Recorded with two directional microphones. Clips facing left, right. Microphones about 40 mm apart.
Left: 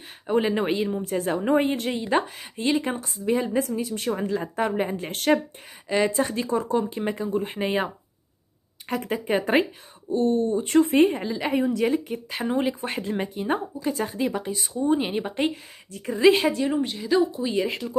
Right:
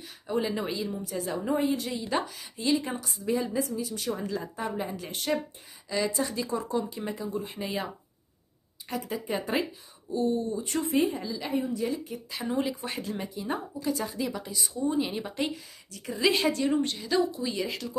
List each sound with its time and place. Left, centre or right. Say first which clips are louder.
0.3 s a woman's voice: left 7 dB; left
11.4 s a woman's voice: left 7 dB; left
11.9 s a woman's voice: left 7 dB; left
13.7 s speech: left 4 dB; left
16.3 s a woman's voice: left 3 dB; left
17.3 s speech: left 6 dB; left